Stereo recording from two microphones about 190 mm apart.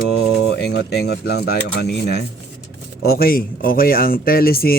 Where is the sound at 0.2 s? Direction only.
60° left (ahead or behind).